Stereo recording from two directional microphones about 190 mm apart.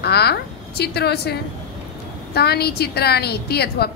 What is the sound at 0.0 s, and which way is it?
A woman's voice, 60° left (ahead or behind).